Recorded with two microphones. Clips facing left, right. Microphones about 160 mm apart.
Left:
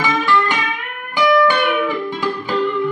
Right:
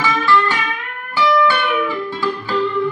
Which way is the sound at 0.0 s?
15° left (ahead or behind).